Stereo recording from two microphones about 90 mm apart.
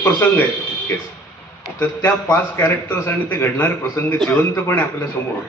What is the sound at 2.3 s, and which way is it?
A man's voice, 25° left (ahead or behind).